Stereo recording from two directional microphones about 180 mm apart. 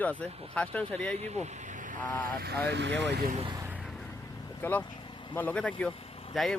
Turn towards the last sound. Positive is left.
turn(degrees=0)  # may be behind; listen again after turning